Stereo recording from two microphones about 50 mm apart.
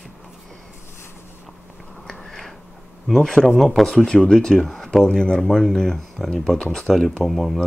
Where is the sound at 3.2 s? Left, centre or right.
Centre.